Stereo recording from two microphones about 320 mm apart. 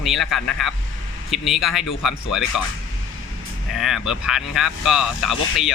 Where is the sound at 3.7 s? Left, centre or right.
Centre.